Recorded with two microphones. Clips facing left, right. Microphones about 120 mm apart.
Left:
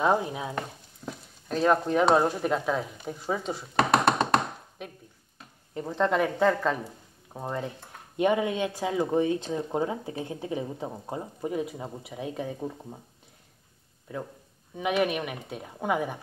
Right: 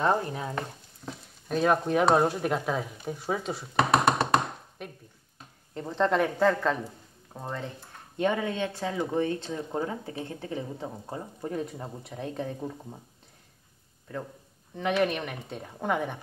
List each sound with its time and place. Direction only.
0.0 s frying: 10° left (ahead or behind)
1.5 s speech: 5° right (ahead or behind)
7.3 s speech: 15° left (ahead or behind)
14.1 s speech: 10° left (ahead or behind)